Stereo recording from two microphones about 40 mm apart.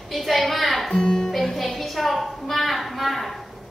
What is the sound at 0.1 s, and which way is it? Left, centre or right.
Speech, centre.